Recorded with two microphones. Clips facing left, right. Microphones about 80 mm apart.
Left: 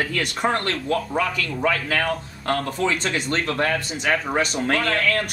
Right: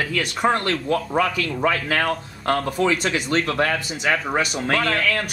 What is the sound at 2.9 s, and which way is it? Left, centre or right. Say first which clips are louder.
A man's voice: right 2 dB; centre.